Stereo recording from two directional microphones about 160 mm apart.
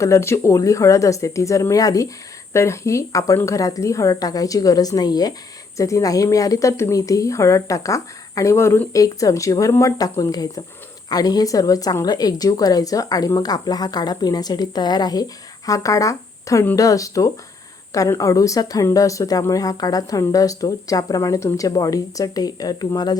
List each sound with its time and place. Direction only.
0.0 s a woman's voice: 20° left (ahead or behind)